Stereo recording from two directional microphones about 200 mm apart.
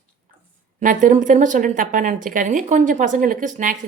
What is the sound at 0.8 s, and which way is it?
Speech, 40° right (ahead or behind).